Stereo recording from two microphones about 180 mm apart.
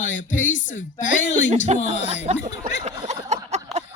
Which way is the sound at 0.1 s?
90° left.